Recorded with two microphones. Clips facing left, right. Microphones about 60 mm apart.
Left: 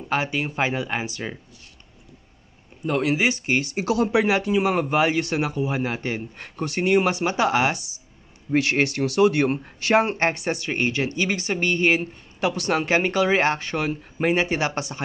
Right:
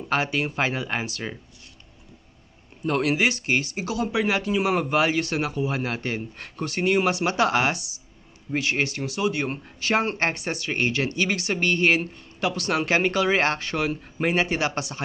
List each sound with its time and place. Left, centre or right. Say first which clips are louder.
0.1 s a man's voice: even; centre
2.8 s a man's voice: left 1 dB; centre
3.7 s speech: left 5 dB; left
4.1 s a man's voice: left 4 dB; centre
6.8 s a man's voice: left 2 dB; centre
8.6 s speech: left 4 dB; left
9.9 s a man's voice: left 4 dB; centre
13.7 s a man's voice: left 1 dB; centre